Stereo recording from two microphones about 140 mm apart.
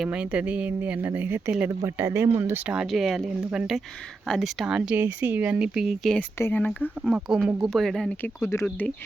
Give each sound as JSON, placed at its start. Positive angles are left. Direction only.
{"t": 0.0, "sound": "speech", "side_deg": -5}
{"t": 2.6, "sound": "speech", "side_deg": -5}
{"t": 4.9, "sound": "speech", "side_deg": -15}
{"t": 6.4, "sound": "speech", "side_deg": 10}
{"t": 7.0, "sound": "speech", "side_deg": 0}
{"t": 8.2, "sound": "speech", "side_deg": 20}